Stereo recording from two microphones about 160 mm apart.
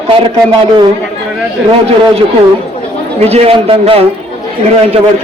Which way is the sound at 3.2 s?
40° right (ahead or behind).